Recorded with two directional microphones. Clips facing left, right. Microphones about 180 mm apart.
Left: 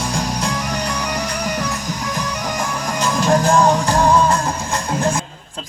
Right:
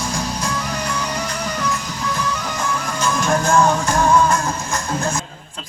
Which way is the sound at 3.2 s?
35° left (ahead or behind).